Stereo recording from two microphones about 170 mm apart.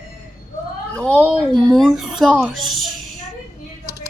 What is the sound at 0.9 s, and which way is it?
A woman's voice, 5° left (ahead or behind).